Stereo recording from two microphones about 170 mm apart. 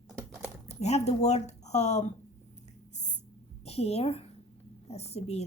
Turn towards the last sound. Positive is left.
turn(degrees=35)  # may be behind; listen again after turning